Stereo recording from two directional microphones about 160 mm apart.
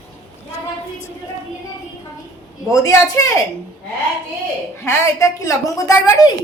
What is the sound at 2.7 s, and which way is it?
Speech, 20° left (ahead or behind).